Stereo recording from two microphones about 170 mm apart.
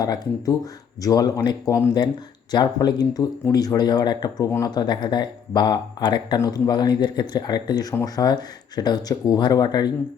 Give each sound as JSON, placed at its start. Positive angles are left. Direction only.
{"t": 0.0, "sound": "speech", "side_deg": 20}